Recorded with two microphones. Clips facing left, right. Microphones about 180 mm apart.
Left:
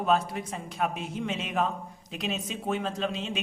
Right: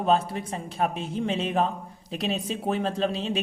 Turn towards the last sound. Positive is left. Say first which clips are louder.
# right 5 dB
turn(degrees=-35)  # may be behind; listen again after turning